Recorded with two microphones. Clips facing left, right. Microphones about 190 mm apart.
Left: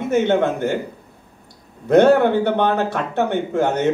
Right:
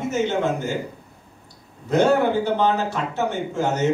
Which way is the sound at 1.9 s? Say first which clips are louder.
Left 5 dB; 60° left (ahead or behind).